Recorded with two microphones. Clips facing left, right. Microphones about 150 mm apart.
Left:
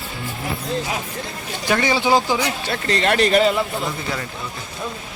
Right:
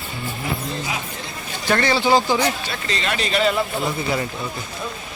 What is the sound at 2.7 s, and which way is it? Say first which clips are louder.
Speech: left 6 dB; 60° left (ahead or behind).